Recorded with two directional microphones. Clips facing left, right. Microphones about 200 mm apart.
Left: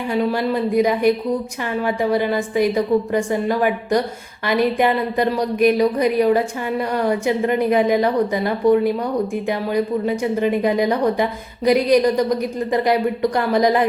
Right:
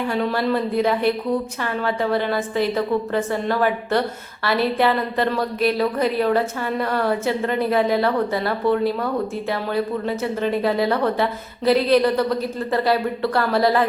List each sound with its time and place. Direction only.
0.1 s speech: 10° left (ahead or behind)